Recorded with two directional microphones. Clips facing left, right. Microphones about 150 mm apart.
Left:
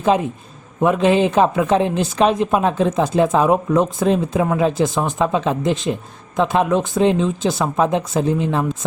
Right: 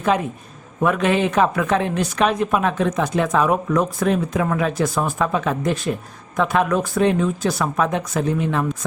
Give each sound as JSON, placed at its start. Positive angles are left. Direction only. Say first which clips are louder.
{"t": 0.8, "sound": "a woman's voice", "louder": "left 4 dB", "side_deg": 25}